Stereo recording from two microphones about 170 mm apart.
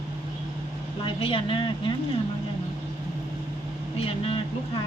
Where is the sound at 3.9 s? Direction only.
35° left (ahead or behind).